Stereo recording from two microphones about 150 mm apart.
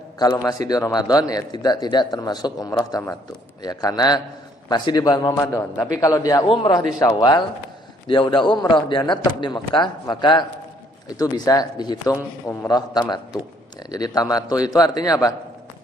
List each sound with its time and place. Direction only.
0.2 s a man's voice: 25° left (ahead or behind)